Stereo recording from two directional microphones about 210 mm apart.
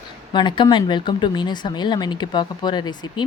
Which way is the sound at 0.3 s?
20° left (ahead or behind).